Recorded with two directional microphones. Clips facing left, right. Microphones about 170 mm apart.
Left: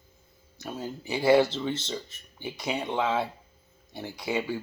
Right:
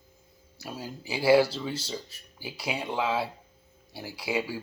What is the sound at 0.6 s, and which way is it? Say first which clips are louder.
Speech: left 3 dB; 10° right (ahead or behind).